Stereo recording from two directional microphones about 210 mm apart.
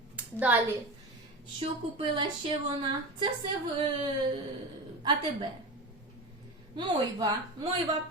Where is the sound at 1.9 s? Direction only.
25° right (ahead or behind).